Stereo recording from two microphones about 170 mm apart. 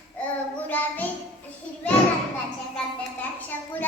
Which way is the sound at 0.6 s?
10° left (ahead or behind).